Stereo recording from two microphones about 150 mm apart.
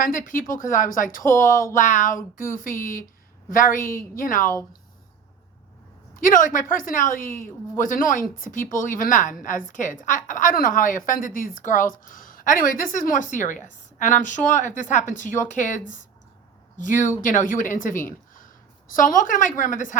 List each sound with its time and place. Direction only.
0.0 s a woman's voice: 65° left (ahead or behind)
6.1 s a woman's voice: 65° left (ahead or behind)